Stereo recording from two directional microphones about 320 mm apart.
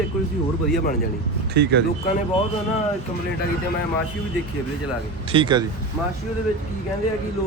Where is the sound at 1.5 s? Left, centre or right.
Right.